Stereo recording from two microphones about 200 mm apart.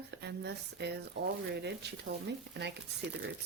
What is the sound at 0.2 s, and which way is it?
Speech, 55° right (ahead or behind).